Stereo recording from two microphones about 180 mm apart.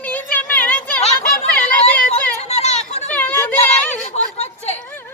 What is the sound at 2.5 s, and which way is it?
Children playing, 35° left (ahead or behind).